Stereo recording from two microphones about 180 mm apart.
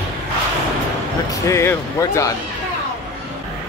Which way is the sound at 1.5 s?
15° left (ahead or behind).